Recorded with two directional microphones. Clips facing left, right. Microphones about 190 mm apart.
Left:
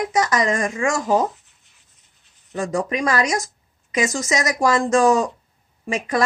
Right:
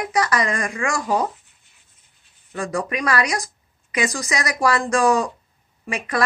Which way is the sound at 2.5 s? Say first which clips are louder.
Left 2 dB; 25° left (ahead or behind).